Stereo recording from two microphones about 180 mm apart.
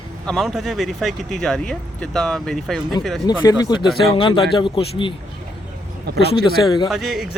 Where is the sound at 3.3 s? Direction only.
20° left (ahead or behind).